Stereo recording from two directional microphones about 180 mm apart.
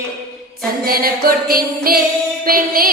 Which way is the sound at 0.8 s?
55° right (ahead or behind).